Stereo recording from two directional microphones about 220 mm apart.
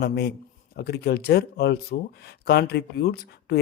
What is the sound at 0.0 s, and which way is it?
Speech, 50° left (ahead or behind).